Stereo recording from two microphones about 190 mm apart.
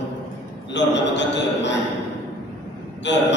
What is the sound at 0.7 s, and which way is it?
A man's voice, 70° left (ahead or behind).